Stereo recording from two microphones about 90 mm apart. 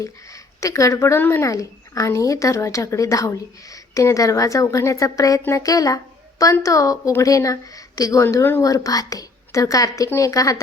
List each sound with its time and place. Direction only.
0.0 s speech: 35° left (ahead or behind)
8.6 s speech: 40° left (ahead or behind)